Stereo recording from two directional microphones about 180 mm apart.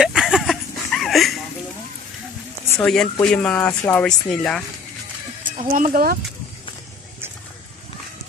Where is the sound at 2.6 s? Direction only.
15° left (ahead or behind).